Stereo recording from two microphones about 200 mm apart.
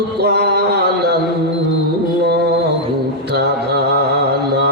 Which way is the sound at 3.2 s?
55° right (ahead or behind).